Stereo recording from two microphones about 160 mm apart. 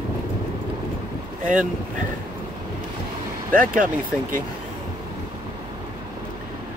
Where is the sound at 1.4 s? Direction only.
50° right (ahead or behind).